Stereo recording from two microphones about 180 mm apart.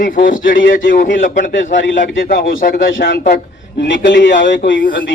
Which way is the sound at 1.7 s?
90° left.